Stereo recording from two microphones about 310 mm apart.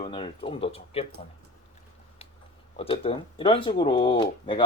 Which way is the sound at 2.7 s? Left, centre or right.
Centre.